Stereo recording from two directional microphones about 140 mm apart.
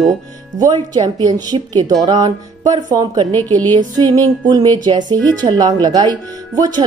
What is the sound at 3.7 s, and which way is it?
Music, 30° right (ahead or behind).